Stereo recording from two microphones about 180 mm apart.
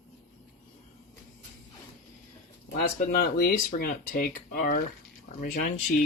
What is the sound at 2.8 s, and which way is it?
Speech, 55° left (ahead or behind).